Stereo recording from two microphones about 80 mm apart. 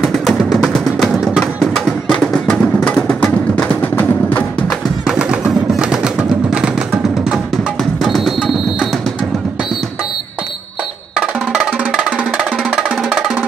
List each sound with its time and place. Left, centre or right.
0.0 s music: centre; by 4.5 s left
4.6 s music: centre
11.8 s music: centre